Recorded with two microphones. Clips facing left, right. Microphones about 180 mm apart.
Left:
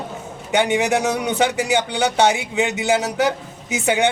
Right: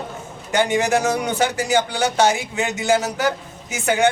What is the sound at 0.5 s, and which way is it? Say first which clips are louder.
A man's voice: even; 15° left (ahead or behind).